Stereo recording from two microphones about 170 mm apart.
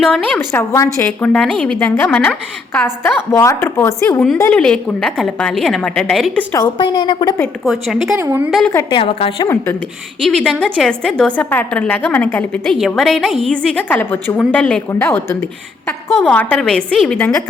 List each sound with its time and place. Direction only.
0.3 s a woman's voice: 15° left (ahead or behind)
6.5 s a woman's voice: 25° left (ahead or behind)
7.6 s a woman's voice: centre (ahead or behind)
8.2 s a woman's voice: 15° right (ahead or behind)
8.4 s a woman's voice: centre (ahead or behind)
8.9 s a woman's voice: 30° left (ahead or behind)
10.2 s a woman's voice: 5° left (ahead or behind)